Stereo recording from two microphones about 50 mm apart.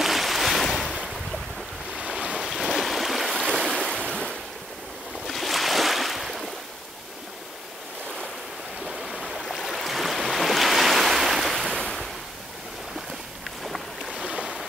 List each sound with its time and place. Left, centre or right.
0.0 s a sound: centre
2.0 s waves: centre
2.3 s stream: centre
3.3 s waves: centre
5.2 s boat: centre
8.8 s stream: centre
9.5 s waves: centre
11.6 s waves: centre
13.7 s boat: centre
14.1 s boat: centre